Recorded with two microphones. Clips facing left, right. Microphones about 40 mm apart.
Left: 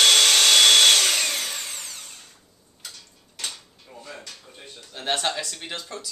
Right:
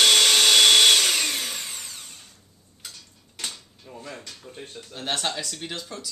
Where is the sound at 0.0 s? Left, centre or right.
Centre.